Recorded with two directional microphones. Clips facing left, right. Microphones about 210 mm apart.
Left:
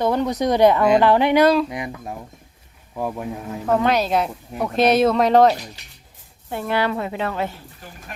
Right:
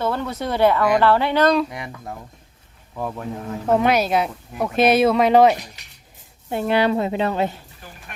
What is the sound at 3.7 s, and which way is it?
Speech, 10° right (ahead or behind).